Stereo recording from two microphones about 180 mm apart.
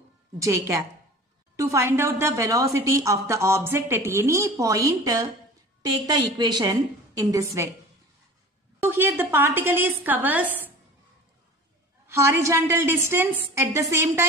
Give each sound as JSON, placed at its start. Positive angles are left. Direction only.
{"t": 0.4, "sound": "a woman's voice", "side_deg": -15}
{"t": 8.7, "sound": "a woman's voice", "side_deg": -10}
{"t": 12.1, "sound": "a woman's voice", "side_deg": -15}